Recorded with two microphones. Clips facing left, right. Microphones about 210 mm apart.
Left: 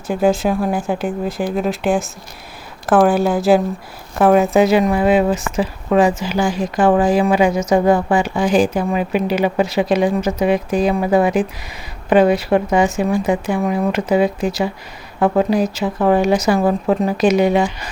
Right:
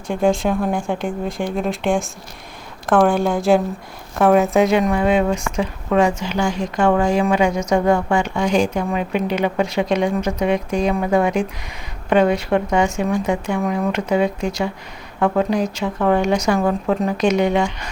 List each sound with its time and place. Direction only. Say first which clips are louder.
0.1 s a woman's voice: left 2 dB; 5° left (ahead or behind)
16.6 s speech: left 3 dB; 15° left (ahead or behind)
16.9 s speech: left 3 dB; 5° left (ahead or behind)